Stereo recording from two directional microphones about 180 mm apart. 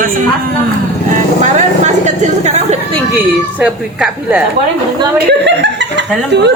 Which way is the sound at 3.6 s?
10° right (ahead or behind).